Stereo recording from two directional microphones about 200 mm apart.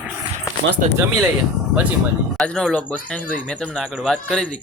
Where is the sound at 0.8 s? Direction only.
40° right (ahead or behind).